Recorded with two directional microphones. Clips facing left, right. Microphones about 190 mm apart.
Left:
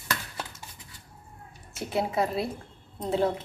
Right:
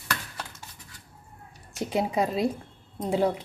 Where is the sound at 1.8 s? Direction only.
15° right (ahead or behind).